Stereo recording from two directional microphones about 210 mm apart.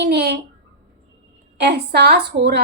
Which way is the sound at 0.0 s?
50° right (ahead or behind).